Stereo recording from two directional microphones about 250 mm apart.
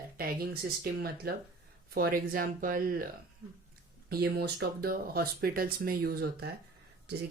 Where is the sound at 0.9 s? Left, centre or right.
Right.